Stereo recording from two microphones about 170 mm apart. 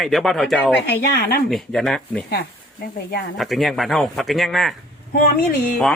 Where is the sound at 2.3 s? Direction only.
65° left (ahead or behind).